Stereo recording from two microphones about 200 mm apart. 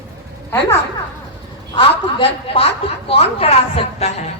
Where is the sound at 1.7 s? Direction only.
25° left (ahead or behind).